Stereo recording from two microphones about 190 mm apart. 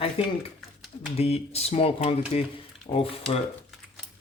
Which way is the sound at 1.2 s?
30° left (ahead or behind).